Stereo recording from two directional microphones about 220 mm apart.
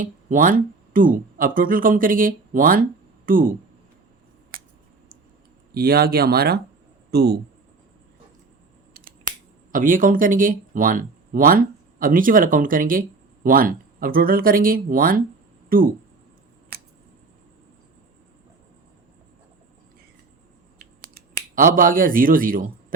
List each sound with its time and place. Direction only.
0.0 s speech: 35° right (ahead or behind)
5.7 s speech: 45° right (ahead or behind)
9.7 s a man's voice: 40° right (ahead or behind)
21.5 s a man's voice: 40° right (ahead or behind)